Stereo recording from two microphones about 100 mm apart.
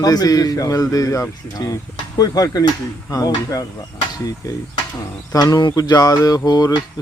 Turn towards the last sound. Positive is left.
turn(degrees=40)  # may be behind; listen again after turning